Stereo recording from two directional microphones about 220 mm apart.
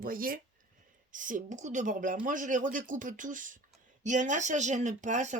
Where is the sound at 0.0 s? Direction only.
40° right (ahead or behind).